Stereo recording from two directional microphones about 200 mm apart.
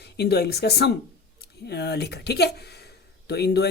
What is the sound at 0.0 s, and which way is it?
Speech, 55° left (ahead or behind).